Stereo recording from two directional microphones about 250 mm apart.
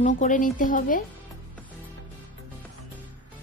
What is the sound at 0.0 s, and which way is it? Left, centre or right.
Speech, left.